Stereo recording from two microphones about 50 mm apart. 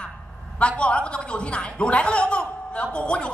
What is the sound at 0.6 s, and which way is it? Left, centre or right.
A man's voice, left.